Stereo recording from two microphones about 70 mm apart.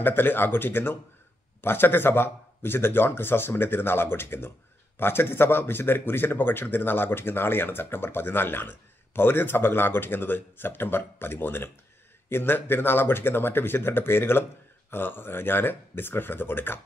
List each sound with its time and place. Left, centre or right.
0.0 s speech: left